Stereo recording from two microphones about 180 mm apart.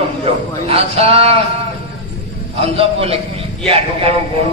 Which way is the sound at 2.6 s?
30° right (ahead or behind).